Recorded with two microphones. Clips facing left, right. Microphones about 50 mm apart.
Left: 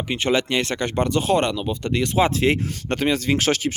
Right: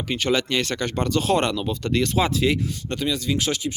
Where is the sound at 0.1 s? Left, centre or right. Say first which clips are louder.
Left 1 dB; left.